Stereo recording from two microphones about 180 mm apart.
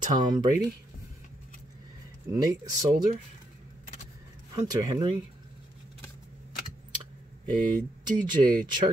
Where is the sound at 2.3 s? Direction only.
20° right (ahead or behind).